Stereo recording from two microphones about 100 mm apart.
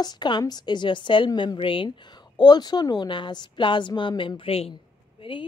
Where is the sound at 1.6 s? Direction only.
60° left (ahead or behind).